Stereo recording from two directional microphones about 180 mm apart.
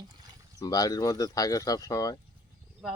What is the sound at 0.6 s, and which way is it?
Speech, 20° left (ahead or behind).